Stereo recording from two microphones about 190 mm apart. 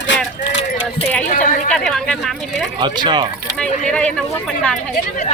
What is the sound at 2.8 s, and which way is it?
Speech, 25° right (ahead or behind).